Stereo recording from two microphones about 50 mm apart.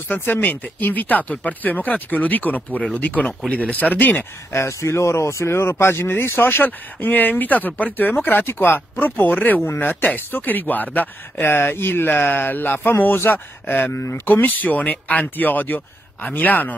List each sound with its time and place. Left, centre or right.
0.1 s speech: left
4.5 s speech: left
11.4 s speech: left
13.9 s speech: left
14.2 s speech: left